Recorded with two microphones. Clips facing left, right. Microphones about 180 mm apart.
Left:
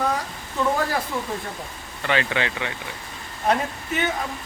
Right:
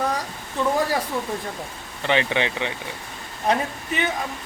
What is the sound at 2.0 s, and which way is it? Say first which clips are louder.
Speech: right 2 dB; 20° right (ahead or behind).